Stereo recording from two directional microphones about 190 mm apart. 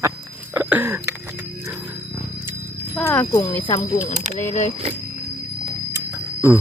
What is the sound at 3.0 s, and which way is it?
Speech, 15° left (ahead or behind).